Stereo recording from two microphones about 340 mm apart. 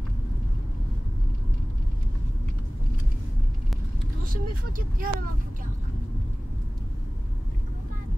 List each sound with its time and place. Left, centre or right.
4.3 s speech: right